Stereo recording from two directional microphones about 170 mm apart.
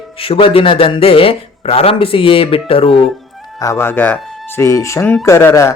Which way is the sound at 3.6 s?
15° left (ahead or behind).